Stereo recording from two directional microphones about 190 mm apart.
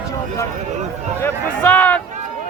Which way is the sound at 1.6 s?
10° left (ahead or behind).